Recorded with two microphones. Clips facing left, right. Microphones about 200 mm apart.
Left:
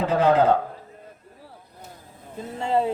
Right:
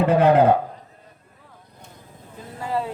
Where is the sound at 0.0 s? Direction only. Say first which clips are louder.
Right 4 dB; 60° right (ahead or behind).